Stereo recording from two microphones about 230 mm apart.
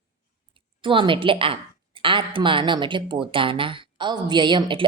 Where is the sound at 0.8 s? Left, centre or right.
Right.